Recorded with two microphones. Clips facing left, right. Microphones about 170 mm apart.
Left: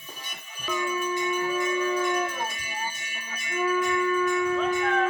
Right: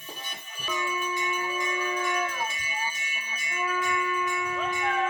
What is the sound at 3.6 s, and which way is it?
Church bell, 40° left (ahead or behind).